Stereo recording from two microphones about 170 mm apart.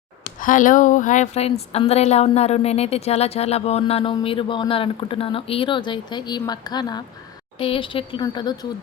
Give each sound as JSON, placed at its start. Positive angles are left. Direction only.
{"t": 0.3, "sound": "a woman's voice", "side_deg": 50}